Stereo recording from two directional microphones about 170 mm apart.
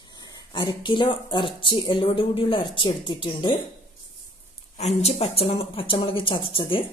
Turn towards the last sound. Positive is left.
turn(degrees=30)  # may be behind; listen again after turning